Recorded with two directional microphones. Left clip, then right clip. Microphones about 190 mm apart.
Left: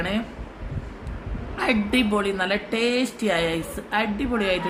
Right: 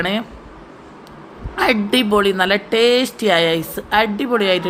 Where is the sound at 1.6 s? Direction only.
15° right (ahead or behind).